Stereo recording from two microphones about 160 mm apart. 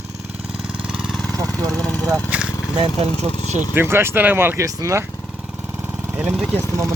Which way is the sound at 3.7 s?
15° right (ahead or behind).